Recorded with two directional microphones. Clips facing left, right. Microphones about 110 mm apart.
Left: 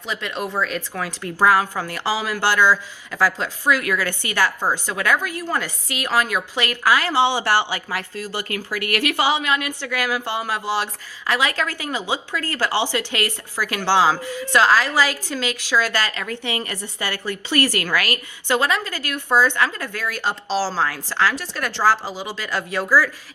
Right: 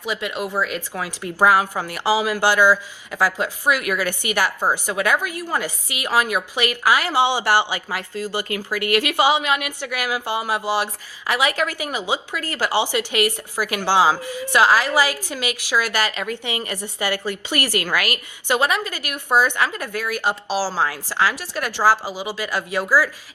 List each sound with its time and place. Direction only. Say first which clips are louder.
0.0 s a woman's voice: right 1 dB; 15° right (ahead or behind)